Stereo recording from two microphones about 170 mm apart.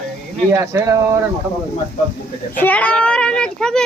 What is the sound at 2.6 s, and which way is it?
A child's voice, 10° left (ahead or behind).